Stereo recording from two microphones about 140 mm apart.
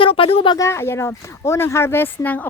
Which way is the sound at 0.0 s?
40° left (ahead or behind).